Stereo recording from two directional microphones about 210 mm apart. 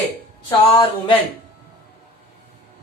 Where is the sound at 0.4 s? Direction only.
20° left (ahead or behind).